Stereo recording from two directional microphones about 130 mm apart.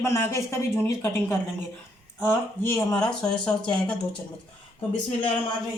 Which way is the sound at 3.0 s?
5° left (ahead or behind).